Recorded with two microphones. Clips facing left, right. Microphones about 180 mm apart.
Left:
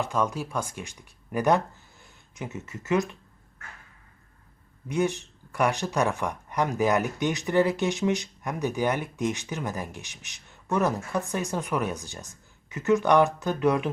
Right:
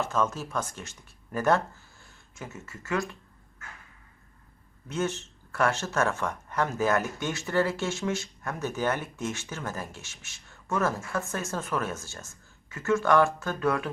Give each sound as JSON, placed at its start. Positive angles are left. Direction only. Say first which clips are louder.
{"t": 0.0, "sound": "speech", "louder": "left 1 dB", "side_deg": 15}
{"t": 4.9, "sound": "speech", "louder": "left 4 dB", "side_deg": 15}